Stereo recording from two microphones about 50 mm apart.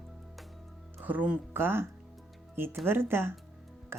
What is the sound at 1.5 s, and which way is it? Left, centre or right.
Speech, right.